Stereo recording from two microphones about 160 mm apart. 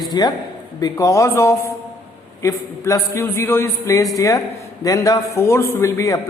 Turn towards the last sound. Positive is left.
turn(degrees=20)  # may be behind; listen again after turning